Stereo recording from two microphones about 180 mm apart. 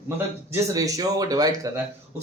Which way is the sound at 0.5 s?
20° right (ahead or behind).